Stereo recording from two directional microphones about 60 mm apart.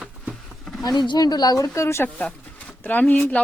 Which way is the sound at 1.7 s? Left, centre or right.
Left.